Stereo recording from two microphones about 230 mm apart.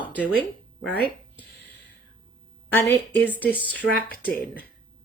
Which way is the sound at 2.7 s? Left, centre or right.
Centre.